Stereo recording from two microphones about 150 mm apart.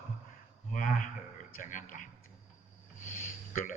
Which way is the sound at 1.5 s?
60° left (ahead or behind).